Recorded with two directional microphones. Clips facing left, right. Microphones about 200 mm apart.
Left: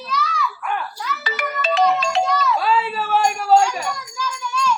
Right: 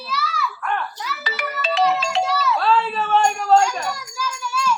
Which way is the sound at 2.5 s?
10° left (ahead or behind).